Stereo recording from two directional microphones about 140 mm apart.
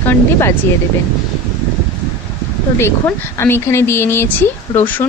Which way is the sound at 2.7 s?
20° left (ahead or behind).